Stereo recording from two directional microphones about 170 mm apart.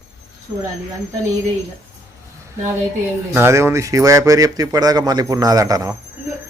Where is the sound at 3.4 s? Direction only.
15° right (ahead or behind).